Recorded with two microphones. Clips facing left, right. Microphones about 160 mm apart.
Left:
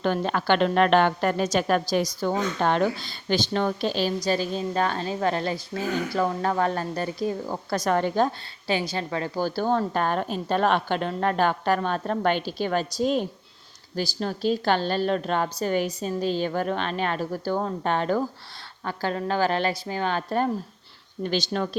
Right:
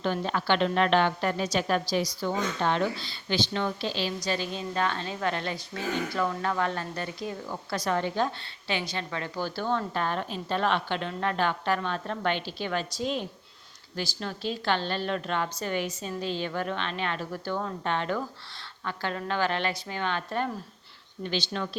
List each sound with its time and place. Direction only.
0.0 s a woman's voice: 55° left (ahead or behind)